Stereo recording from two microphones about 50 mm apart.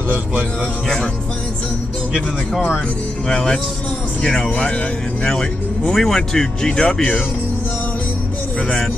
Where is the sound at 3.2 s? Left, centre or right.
Centre.